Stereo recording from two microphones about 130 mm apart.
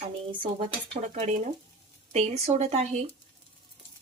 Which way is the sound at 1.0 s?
60° right (ahead or behind).